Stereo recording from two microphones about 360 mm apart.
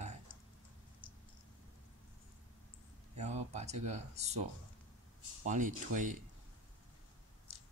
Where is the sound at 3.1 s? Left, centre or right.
Centre.